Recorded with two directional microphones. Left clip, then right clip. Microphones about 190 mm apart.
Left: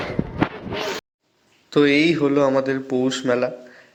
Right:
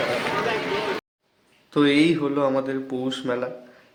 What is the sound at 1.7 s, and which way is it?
Speech, 20° left (ahead or behind).